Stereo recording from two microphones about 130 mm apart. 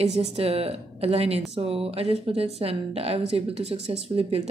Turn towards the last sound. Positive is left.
turn(degrees=-50)  # may be behind; listen again after turning